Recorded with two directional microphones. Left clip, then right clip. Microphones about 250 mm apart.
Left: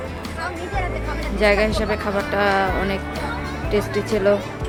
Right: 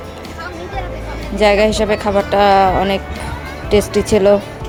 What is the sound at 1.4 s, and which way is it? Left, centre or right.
Speech, centre.